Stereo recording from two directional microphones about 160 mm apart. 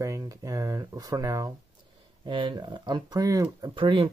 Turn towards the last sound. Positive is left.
turn(degrees=-30)  # may be behind; listen again after turning